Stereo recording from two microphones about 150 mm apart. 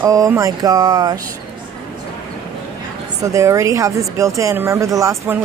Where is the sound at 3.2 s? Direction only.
20° right (ahead or behind).